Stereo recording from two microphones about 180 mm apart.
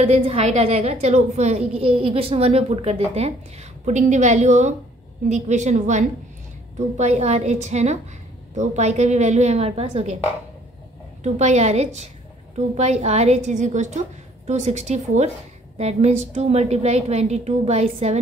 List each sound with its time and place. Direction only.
0.0 s a woman's voice: 35° right (ahead or behind)
11.2 s a woman's voice: 40° right (ahead or behind)